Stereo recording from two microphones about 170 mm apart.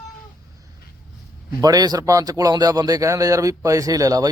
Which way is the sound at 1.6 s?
20° right (ahead or behind).